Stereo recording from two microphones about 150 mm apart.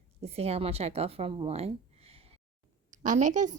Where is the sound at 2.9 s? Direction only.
55° right (ahead or behind).